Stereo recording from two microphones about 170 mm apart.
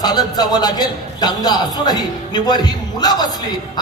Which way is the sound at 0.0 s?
25° left (ahead or behind).